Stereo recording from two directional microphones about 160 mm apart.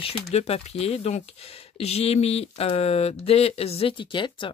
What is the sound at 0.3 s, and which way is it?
Speech, 40° left (ahead or behind).